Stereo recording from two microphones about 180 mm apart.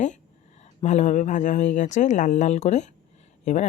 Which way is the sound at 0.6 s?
40° left (ahead or behind).